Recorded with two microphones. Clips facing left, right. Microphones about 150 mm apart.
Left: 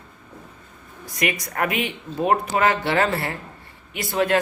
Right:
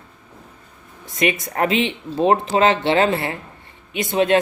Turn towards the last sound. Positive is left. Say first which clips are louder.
# right 4 dB
turn(degrees=-20)  # may be behind; listen again after turning